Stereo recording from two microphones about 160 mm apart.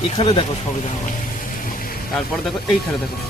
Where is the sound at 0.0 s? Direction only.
35° left (ahead or behind).